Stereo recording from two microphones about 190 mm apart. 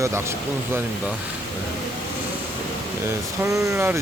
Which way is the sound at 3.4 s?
15° right (ahead or behind).